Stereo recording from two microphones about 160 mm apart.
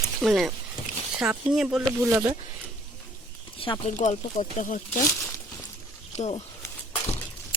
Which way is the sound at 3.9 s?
50° left (ahead or behind).